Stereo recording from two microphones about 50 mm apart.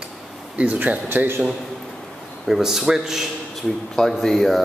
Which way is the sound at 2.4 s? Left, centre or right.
Centre.